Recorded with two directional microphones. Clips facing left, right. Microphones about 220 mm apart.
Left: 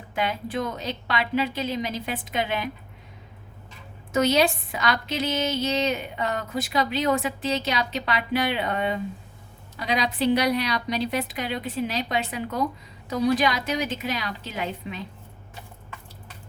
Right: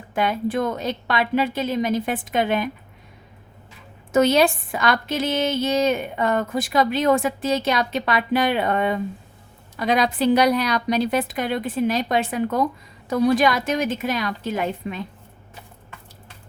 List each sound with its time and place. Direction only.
0.1 s a woman's voice: 50° right (ahead or behind)
4.1 s a woman's voice: 50° right (ahead or behind)